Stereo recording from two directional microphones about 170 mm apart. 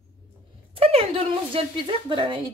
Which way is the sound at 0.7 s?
35° right (ahead or behind).